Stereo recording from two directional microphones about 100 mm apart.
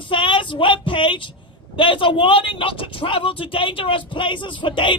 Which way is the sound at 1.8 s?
60° left (ahead or behind).